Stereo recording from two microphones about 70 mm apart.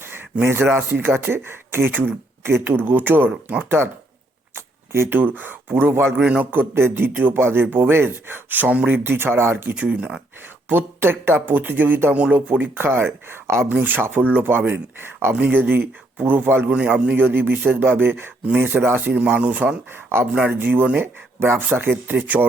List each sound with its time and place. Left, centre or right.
0.4 s speech: right
3.2 s speech: centre
4.5 s speech: right
6.2 s speech: right
9.0 s speech: right
9.7 s speech: right
10.7 s speech: right
16.6 s speech: centre
20.5 s speech: right